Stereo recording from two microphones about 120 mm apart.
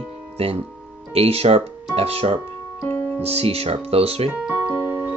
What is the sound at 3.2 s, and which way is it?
Speech, 55° right (ahead or behind).